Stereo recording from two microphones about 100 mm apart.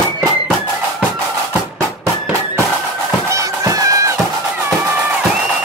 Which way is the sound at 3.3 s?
35° right (ahead or behind).